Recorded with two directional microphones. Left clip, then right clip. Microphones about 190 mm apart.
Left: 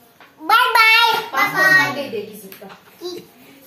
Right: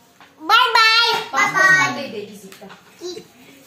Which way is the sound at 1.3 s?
10° right (ahead or behind).